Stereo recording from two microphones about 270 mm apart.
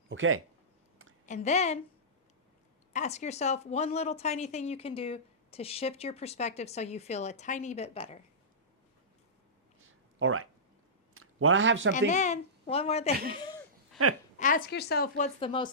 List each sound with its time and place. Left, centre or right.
0.1 s speech: right
1.3 s speech: left
2.9 s speech: left
10.2 s speech: right
11.9 s speech: left
14.0 s speech: right
14.3 s speech: left